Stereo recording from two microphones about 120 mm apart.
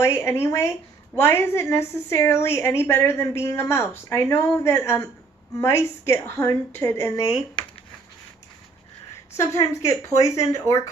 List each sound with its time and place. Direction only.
0.0 s a woman's voice: 20° left (ahead or behind)
9.4 s a woman's voice: 25° left (ahead or behind)